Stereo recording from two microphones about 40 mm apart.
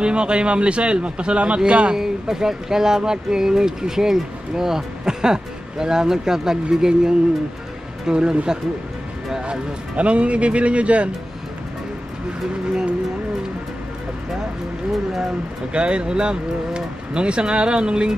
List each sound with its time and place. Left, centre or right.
0.0 s speech: right
2.0 s speech: centre
9.9 s speech: right
15.7 s speech: right